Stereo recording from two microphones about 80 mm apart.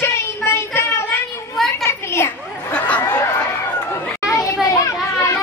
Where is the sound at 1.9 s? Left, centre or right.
Left.